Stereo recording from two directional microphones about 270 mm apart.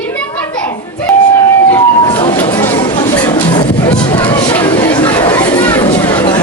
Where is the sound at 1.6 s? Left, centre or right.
Centre.